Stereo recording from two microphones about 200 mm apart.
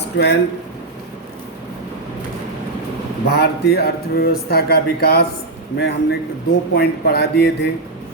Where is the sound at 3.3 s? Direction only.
55° left (ahead or behind).